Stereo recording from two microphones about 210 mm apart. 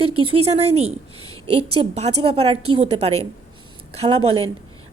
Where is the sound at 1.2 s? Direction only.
90° right.